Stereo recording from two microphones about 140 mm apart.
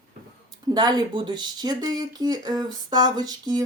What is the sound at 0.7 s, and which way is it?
Speech, 30° right (ahead or behind).